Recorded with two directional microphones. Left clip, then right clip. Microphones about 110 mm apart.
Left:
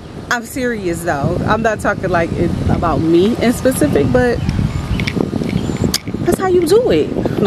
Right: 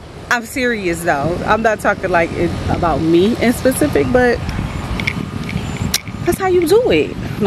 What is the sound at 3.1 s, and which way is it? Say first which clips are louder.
Speech: left 1 dB; 5° left (ahead or behind).